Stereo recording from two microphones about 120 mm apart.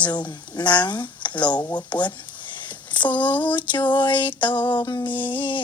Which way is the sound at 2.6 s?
40° left (ahead or behind).